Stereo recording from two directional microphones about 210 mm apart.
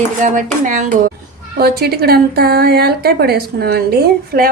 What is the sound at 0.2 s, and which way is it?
A woman's voice, 40° right (ahead or behind).